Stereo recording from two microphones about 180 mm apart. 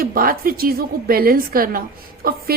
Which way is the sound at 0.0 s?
55° right (ahead or behind).